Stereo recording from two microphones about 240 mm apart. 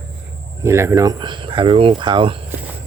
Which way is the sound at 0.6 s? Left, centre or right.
Centre.